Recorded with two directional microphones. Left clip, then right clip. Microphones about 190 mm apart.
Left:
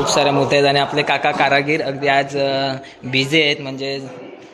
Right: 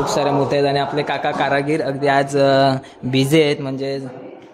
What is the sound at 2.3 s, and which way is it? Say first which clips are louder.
Speech: right 5 dB; 40° right (ahead or behind).